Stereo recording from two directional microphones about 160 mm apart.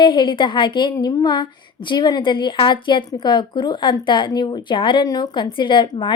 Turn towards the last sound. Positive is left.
turn(degrees=30)  # may be behind; listen again after turning